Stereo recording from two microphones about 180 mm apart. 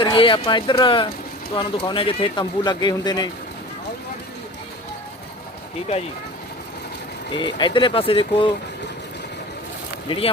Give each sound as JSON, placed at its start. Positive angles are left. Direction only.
{"t": 0.0, "sound": "speech", "side_deg": 25}
{"t": 7.3, "sound": "speech", "side_deg": 25}
{"t": 10.1, "sound": "speech", "side_deg": 30}